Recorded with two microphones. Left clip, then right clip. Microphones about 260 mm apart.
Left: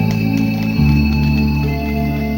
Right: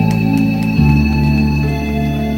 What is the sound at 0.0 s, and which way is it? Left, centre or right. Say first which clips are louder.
Music: right 3 dB; right.